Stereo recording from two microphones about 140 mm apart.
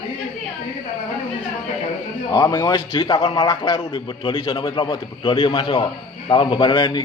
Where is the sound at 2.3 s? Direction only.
30° left (ahead or behind).